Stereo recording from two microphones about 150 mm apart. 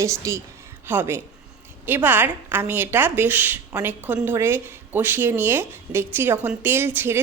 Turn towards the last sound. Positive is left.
turn(degrees=-15)  # may be behind; listen again after turning